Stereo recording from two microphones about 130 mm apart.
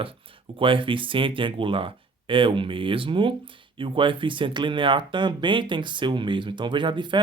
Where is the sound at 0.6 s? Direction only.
40° right (ahead or behind).